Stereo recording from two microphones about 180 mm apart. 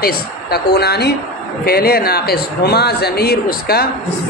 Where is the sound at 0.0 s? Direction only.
60° left (ahead or behind).